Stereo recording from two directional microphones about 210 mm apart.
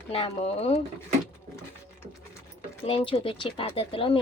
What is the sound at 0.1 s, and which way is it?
Speech, 25° left (ahead or behind).